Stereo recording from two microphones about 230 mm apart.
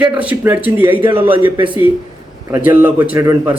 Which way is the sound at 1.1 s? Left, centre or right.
Right.